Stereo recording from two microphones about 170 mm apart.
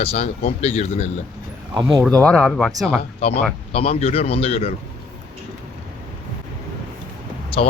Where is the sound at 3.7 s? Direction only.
35° left (ahead or behind).